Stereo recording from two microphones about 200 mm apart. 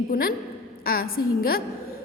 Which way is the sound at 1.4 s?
50° left (ahead or behind).